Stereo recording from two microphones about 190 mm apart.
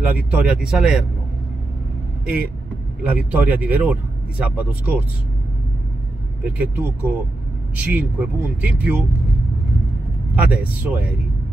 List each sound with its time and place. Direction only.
0.0 s speech: 10° right (ahead or behind)
3.0 s speech: 5° right (ahead or behind)
6.4 s speech: 10° right (ahead or behind)
10.3 s speech: 5° right (ahead or behind)